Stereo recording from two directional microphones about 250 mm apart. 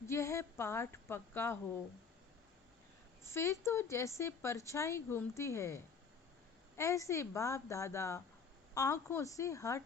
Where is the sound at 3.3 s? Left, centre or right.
Centre.